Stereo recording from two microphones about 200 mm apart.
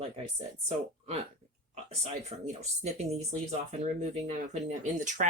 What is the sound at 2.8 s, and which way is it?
Speech, 35° right (ahead or behind).